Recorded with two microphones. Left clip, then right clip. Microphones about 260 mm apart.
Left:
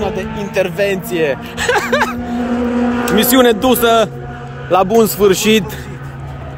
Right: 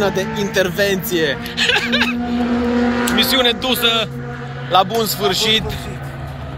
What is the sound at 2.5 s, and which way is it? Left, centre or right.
Speech, left.